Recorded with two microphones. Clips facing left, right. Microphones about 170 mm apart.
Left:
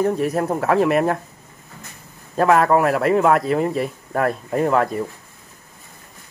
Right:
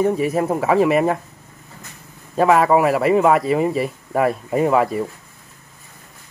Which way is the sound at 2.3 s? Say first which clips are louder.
Right 1 dB; centre (ahead or behind).